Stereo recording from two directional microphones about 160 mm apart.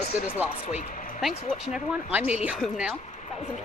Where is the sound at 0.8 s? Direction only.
50° left (ahead or behind).